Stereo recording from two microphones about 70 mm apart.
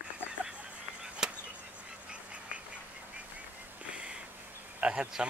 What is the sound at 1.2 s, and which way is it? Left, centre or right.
Chop, centre.